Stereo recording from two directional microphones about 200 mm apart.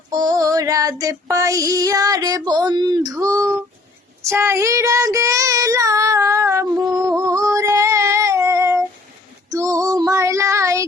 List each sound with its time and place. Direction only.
0.1 s female singing: 20° right (ahead or behind)
4.2 s child singing: 15° right (ahead or behind)
9.5 s female singing: 15° right (ahead or behind)